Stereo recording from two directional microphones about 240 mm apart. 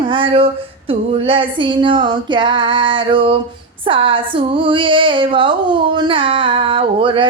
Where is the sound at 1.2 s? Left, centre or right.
Right.